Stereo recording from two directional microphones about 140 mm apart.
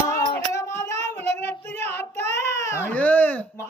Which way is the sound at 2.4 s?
20° left (ahead or behind).